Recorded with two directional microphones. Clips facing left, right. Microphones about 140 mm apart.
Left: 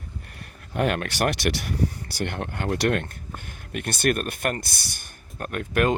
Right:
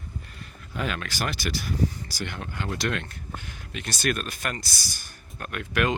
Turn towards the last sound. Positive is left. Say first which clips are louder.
# left 4 dB
turn(degrees=45)  # may be behind; listen again after turning